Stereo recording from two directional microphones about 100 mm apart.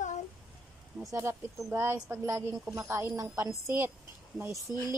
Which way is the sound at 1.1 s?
30° right (ahead or behind).